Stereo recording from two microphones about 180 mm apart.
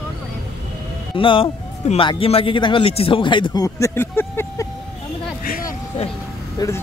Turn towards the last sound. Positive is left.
turn(degrees=15)  # may be behind; listen again after turning